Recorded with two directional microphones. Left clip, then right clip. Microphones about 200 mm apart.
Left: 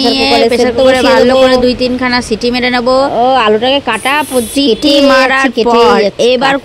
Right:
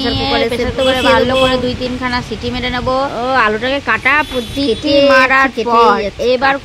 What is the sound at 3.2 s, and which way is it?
Speech, 25° left (ahead or behind).